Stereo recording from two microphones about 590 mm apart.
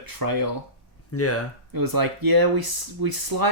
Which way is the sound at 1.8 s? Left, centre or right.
Right.